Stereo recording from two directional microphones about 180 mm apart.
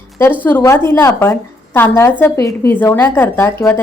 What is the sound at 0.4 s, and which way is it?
A woman's voice, 15° left (ahead or behind).